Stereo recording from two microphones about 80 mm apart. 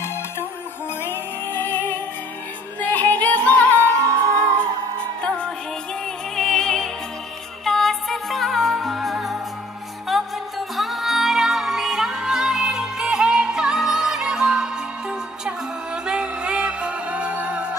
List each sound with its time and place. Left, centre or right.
0.0 s music: left
4.1 s music: right
4.6 s music: centre